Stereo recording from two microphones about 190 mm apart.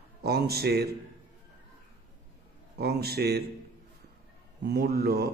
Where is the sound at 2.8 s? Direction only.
55° right (ahead or behind).